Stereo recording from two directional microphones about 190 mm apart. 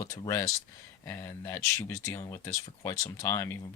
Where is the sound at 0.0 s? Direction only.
15° left (ahead or behind).